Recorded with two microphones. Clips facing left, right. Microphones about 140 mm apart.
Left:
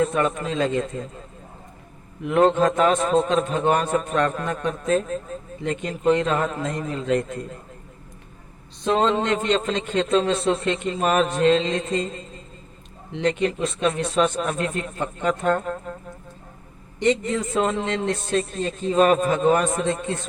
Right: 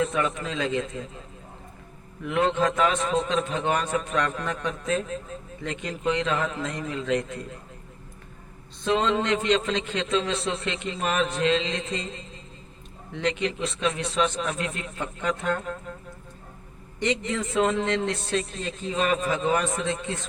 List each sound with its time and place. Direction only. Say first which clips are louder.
0.0 s a man's voice: left 4 dB; 45° left (ahead or behind)
2.3 s a man's voice: left 6 dB; 45° left (ahead or behind)
8.9 s a man's voice: left 3 dB; 45° left (ahead or behind)
13.2 s a man's voice: left 5 dB; 45° left (ahead or behind)
17.0 s a man's voice: left 5 dB; 45° left (ahead or behind)